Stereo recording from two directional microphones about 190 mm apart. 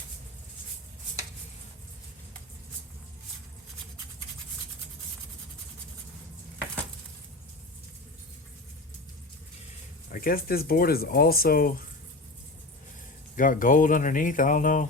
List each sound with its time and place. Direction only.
10.1 s speech: 50° left (ahead or behind)
13.3 s speech: 45° left (ahead or behind)